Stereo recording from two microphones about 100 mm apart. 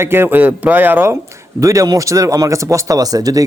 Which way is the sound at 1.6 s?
30° right (ahead or behind).